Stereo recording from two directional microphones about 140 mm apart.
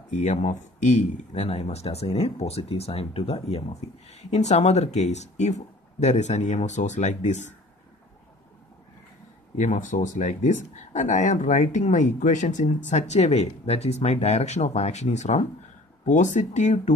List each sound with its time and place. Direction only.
0.1 s speech: 55° left (ahead or behind)
9.6 s speech: 65° left (ahead or behind)